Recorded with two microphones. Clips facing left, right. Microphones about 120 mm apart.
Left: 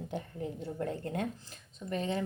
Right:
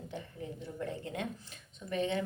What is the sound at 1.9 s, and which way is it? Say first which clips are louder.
Speech: right 1 dB; 35° left (ahead or behind).